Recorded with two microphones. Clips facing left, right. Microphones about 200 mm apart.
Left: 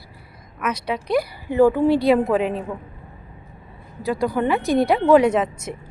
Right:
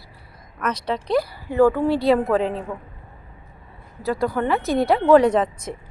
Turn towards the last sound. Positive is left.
turn(degrees=10)  # may be behind; listen again after turning